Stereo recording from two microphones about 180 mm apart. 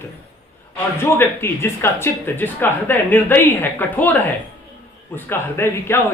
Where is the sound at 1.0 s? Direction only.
15° left (ahead or behind).